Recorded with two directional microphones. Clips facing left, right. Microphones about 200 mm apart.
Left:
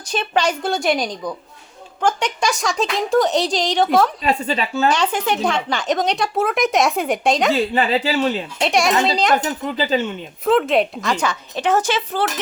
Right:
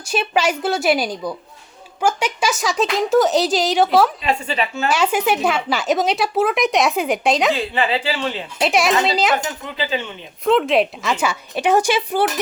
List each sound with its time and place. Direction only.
0.0 s a woman's voice: 10° right (ahead or behind)
4.2 s a woman's voice: 40° left (ahead or behind)
4.9 s speech: 10° right (ahead or behind)
7.5 s speech: 45° left (ahead or behind)
8.5 s speech: 5° right (ahead or behind)
9.7 s speech: 40° left (ahead or behind)
10.4 s a woman's voice: centre (ahead or behind)